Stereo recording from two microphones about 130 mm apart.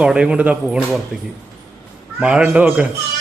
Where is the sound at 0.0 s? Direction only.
5° right (ahead or behind).